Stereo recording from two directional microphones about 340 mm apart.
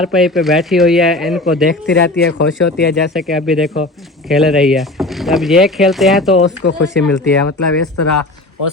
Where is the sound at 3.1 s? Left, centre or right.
Centre.